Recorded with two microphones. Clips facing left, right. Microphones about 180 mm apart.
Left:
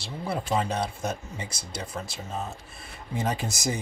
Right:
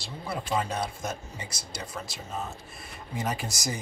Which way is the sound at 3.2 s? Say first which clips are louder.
Left 3 dB; 25° left (ahead or behind).